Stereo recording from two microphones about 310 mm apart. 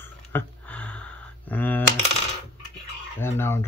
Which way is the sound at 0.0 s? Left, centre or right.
Centre.